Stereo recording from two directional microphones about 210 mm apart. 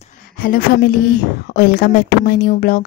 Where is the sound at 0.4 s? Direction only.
45° left (ahead or behind).